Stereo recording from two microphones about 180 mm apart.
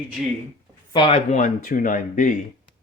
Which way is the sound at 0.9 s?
35° left (ahead or behind).